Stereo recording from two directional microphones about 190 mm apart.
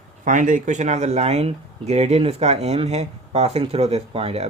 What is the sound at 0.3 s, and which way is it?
Speech, 40° right (ahead or behind).